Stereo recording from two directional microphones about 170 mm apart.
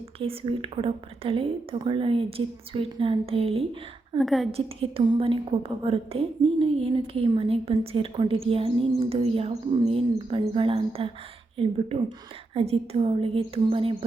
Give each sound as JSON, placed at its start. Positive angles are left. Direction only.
{"t": 0.2, "sound": "a woman's voice", "side_deg": -35}
{"t": 4.2, "sound": "a woman's voice", "side_deg": 0}
{"t": 4.5, "sound": "a woman's voice", "side_deg": -35}